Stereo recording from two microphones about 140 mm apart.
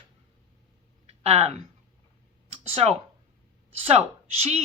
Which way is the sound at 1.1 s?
50° right (ahead or behind).